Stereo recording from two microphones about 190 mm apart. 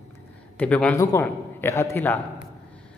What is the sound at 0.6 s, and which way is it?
A man's voice, 5° left (ahead or behind).